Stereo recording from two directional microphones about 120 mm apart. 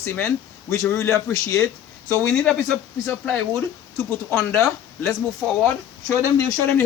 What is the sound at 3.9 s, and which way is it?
A man's voice, 20° left (ahead or behind).